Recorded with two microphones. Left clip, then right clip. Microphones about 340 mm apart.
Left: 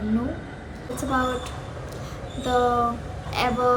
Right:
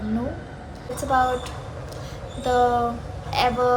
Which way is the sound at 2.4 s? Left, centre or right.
Centre.